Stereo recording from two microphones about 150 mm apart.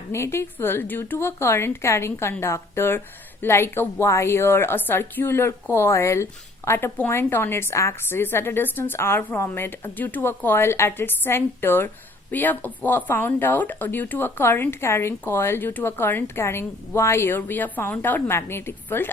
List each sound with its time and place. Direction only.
0.1 s speech: 15° left (ahead or behind)